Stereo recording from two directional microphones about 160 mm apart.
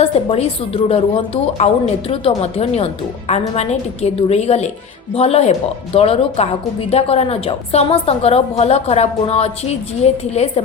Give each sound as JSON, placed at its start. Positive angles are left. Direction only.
{"t": 0.0, "sound": "a woman's voice", "side_deg": 40}